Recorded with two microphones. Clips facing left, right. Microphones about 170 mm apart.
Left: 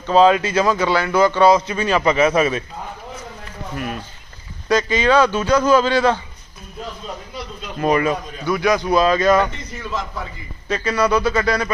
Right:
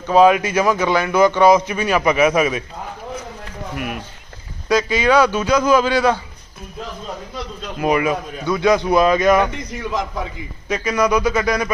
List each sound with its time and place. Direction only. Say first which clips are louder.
0.1 s a man's voice: right 1 dB; 15° right (ahead or behind)
3.8 s a man's voice: left 1 dB; 15° right (ahead or behind)
7.8 s a man's voice: even; 10° right (ahead or behind)
8.4 s a man's voice: right 2 dB; 20° right (ahead or behind)